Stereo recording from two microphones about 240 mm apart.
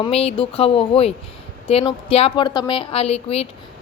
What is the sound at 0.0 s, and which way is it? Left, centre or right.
Speech, left.